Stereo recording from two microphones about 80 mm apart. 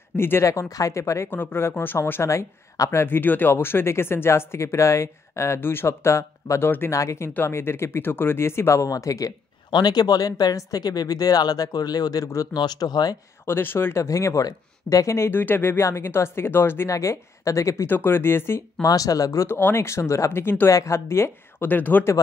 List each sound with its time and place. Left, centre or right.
0.1 s speech: left
0.5 s speech: left
9.7 s speech: left
12.5 s speech: left
13.5 s speech: left
16.9 s speech: left
17.8 s speech: left
18.9 s speech: left
19.4 s speech: left